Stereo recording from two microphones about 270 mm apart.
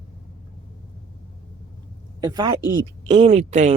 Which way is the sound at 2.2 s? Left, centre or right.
Centre.